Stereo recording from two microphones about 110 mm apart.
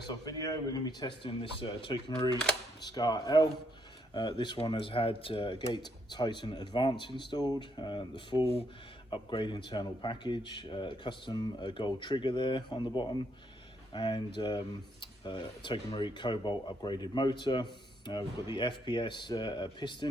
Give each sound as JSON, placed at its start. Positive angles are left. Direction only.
{"t": 0.3, "sound": "speech", "side_deg": 35}
{"t": 1.3, "sound": "speech", "side_deg": 55}